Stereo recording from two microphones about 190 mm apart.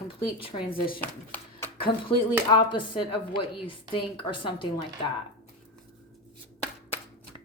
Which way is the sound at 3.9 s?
25° left (ahead or behind).